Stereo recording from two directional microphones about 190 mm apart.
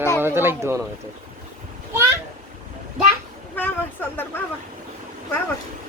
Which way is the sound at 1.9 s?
15° right (ahead or behind).